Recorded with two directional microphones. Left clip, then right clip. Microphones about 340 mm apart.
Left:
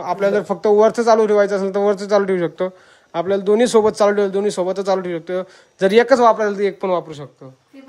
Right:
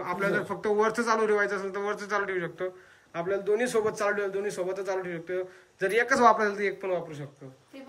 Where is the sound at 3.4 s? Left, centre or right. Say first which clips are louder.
Left 13 dB; centre.